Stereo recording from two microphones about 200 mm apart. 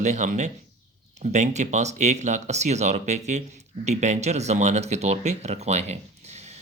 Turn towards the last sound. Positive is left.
turn(degrees=-30)  # may be behind; listen again after turning